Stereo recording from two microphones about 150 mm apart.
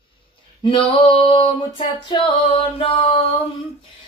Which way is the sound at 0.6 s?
35° left (ahead or behind).